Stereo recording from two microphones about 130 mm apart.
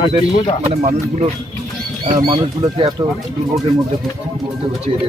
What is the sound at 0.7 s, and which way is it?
Speech, 55° right (ahead or behind).